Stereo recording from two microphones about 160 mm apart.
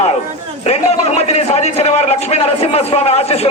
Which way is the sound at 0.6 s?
40° left (ahead or behind).